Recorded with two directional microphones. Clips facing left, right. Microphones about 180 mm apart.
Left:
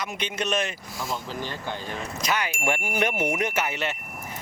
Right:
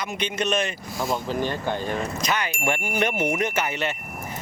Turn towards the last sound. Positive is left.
turn(degrees=5)  # may be behind; listen again after turning